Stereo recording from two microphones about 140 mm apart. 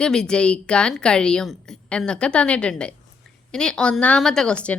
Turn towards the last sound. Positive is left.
turn(degrees=5)  # may be behind; listen again after turning